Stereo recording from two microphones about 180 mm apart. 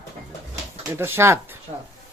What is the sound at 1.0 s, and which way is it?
Speech, 15° right (ahead or behind).